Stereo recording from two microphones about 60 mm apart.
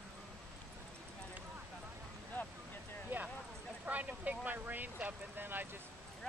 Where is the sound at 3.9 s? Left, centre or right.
Right.